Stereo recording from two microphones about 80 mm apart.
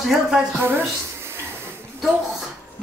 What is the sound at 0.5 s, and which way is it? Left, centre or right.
Speech, right.